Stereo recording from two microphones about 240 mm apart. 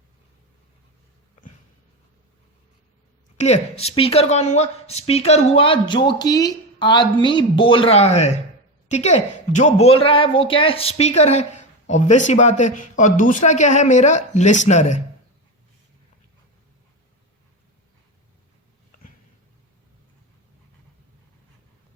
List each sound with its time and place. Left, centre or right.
3.3 s a woman's voice: left